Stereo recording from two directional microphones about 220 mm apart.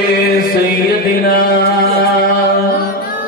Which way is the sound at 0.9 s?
40° left (ahead or behind).